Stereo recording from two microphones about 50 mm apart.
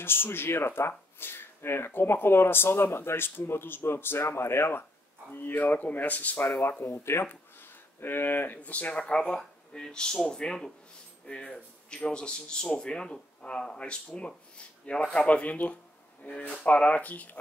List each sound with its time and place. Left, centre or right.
0.0 s speech: left
5.3 s speech: left
7.2 s a sound: left
8.5 s speech: left
8.9 s speech: centre